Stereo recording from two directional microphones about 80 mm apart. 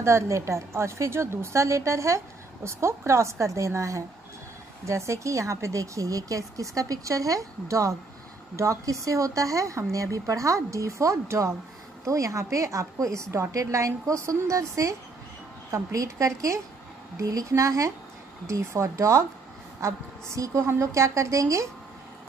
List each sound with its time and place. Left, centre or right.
0.0 s a woman's voice: right